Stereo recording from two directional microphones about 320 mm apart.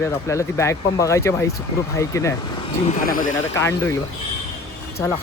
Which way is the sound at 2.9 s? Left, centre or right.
Left.